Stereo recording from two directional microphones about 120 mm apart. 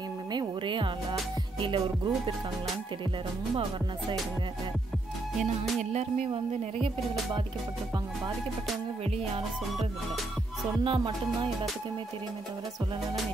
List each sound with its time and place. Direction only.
0.3 s music: 40° right (ahead or behind)
5.8 s music: 70° right (ahead or behind)
10.8 s music: 45° right (ahead or behind)